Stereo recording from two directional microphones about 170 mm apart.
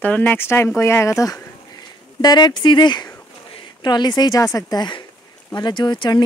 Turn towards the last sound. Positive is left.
turn(degrees=25)  # may be behind; listen again after turning